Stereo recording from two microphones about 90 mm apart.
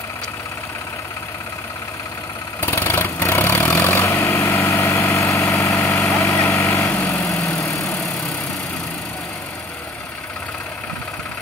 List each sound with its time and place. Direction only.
2.6 s vehicle: 25° left (ahead or behind)